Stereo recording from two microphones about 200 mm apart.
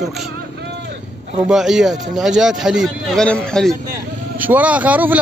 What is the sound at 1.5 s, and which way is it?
A man's voice, centre (ahead or behind).